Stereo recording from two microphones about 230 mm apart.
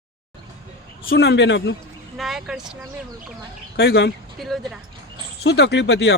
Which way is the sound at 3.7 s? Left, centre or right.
Left.